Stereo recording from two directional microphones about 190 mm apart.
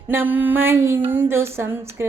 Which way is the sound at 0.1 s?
10° right (ahead or behind).